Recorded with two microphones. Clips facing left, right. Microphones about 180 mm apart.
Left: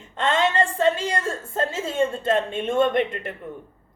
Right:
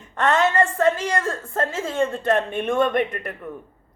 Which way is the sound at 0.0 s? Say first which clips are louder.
Right 2 dB; 25° left (ahead or behind).